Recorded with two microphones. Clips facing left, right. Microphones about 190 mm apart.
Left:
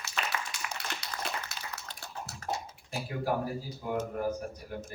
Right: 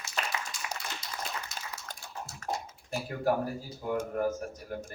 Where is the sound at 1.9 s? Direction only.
45° right (ahead or behind).